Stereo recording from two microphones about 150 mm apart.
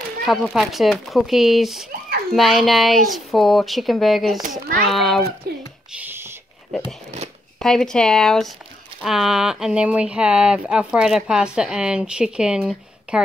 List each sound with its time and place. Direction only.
0.2 s speech: centre (ahead or behind)
4.4 s a child's voice: 70° right (ahead or behind)
4.8 s speech: centre (ahead or behind)
5.9 s a sound: 15° right (ahead or behind)
7.5 s speech: 5° left (ahead or behind)